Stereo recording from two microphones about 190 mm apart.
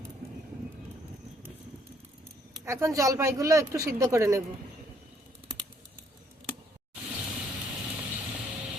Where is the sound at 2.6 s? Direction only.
15° right (ahead or behind).